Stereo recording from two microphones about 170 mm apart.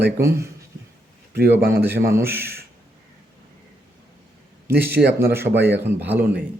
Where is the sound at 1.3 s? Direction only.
70° right (ahead or behind).